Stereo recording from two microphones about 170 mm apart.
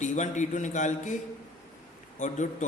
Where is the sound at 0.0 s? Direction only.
45° left (ahead or behind).